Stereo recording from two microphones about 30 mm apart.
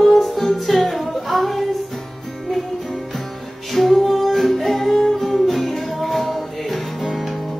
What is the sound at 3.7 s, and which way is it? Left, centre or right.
Music, centre.